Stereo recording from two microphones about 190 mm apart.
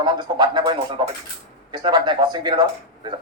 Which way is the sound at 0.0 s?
25° right (ahead or behind).